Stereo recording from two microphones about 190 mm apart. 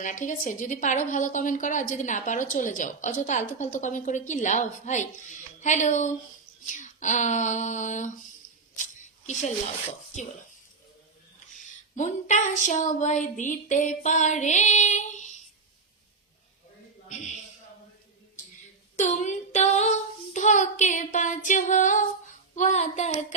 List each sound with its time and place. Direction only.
0.0 s a woman's voice: 40° left (ahead or behind)
8.7 s a sound: 40° left (ahead or behind)
11.6 s a woman's voice: 40° left (ahead or behind)
18.9 s child singing: 40° left (ahead or behind)
22.5 s a woman's voice: 40° left (ahead or behind)